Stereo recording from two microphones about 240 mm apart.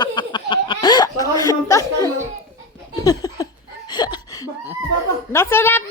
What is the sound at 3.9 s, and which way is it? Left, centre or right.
Laughter, centre.